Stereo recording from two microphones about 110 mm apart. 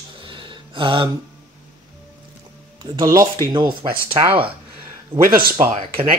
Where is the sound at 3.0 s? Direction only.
30° right (ahead or behind).